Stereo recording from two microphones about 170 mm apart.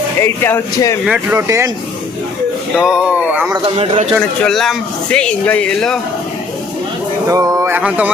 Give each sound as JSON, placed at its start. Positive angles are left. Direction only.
{"t": 0.2, "sound": "speech", "side_deg": 15}
{"t": 1.0, "sound": "speech", "side_deg": -10}
{"t": 2.8, "sound": "speech", "side_deg": -5}
{"t": 3.8, "sound": "speech", "side_deg": -40}
{"t": 4.4, "sound": "speech", "side_deg": 0}
{"t": 7.3, "sound": "speech", "side_deg": -20}